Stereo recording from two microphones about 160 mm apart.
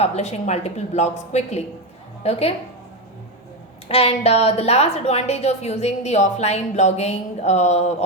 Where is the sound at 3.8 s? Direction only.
40° left (ahead or behind).